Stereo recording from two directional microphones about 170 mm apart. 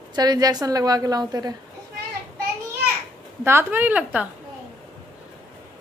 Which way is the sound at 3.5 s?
15° right (ahead or behind).